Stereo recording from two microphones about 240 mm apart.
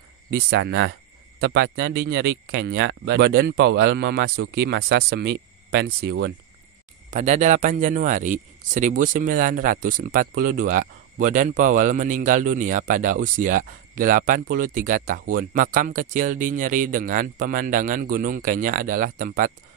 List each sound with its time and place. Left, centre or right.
0.3 s speech: right
7.1 s speech: right